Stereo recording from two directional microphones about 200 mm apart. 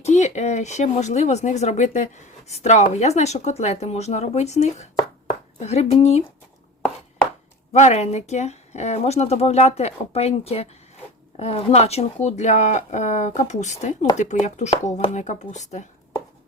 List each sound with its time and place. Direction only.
0.0 s speech: 35° left (ahead or behind)
7.7 s speech: 35° left (ahead or behind)